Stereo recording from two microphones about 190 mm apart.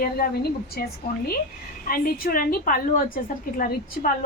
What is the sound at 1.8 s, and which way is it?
A woman's voice, 50° left (ahead or behind).